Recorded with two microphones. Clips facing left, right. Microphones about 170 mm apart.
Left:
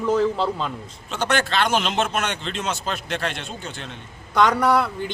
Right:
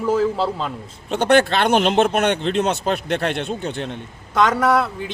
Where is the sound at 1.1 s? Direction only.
55° right (ahead or behind).